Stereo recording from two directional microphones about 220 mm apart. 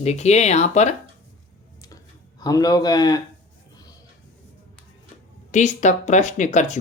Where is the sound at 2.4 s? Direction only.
15° left (ahead or behind).